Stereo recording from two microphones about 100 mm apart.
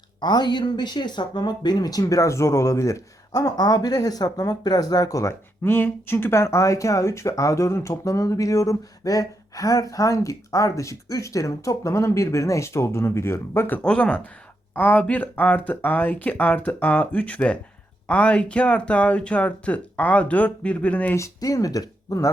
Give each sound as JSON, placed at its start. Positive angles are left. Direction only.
{"t": 0.2, "sound": "speech", "side_deg": 45}
{"t": 5.6, "sound": "speech", "side_deg": 20}
{"t": 21.2, "sound": "speech", "side_deg": 35}